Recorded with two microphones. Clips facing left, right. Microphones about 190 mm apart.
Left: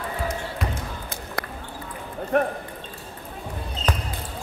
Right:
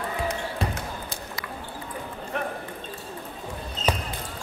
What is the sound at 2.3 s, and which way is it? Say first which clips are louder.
Squish: left 9 dB; 55° left (ahead or behind).